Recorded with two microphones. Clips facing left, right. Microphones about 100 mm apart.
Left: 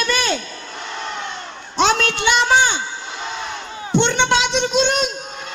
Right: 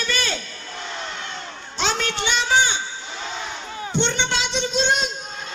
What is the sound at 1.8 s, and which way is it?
A woman's voice, 65° left (ahead or behind).